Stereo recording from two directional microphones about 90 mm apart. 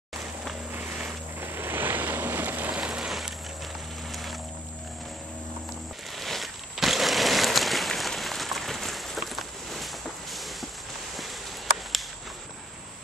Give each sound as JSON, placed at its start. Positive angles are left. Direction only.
{"t": 0.7, "sound": "vehicle", "side_deg": -20}
{"t": 4.1, "sound": "boat", "side_deg": 0}
{"t": 6.1, "sound": "a sound", "side_deg": 0}